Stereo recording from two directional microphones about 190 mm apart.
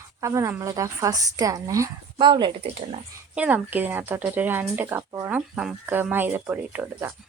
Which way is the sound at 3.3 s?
5° right (ahead or behind).